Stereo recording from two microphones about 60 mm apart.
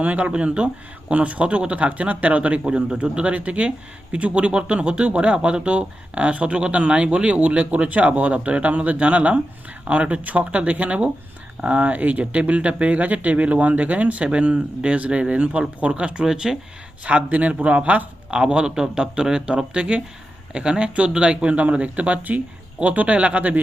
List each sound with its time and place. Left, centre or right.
0.0 s speech: right
17.0 s speech: right